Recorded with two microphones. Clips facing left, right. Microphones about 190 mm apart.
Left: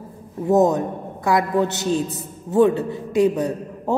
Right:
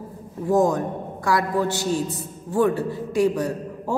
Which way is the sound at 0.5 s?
20° left (ahead or behind).